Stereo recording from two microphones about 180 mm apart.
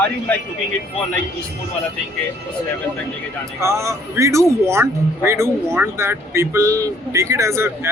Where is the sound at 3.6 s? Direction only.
15° right (ahead or behind).